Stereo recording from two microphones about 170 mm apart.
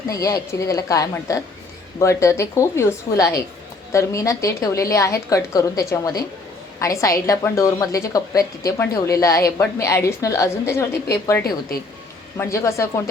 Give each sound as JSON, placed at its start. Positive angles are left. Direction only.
{"t": 0.1, "sound": "a woman's voice", "side_deg": 20}
{"t": 12.4, "sound": "a woman's voice", "side_deg": 15}